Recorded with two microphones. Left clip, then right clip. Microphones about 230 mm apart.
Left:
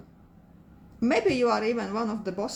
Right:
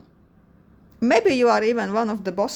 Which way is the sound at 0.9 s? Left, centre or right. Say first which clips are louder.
Right 6 dB; right.